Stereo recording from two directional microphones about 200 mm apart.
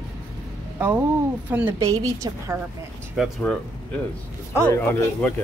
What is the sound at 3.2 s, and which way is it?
Speech, 5° left (ahead or behind).